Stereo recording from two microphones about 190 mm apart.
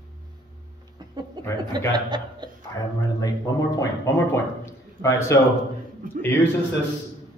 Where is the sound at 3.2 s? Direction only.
20° left (ahead or behind).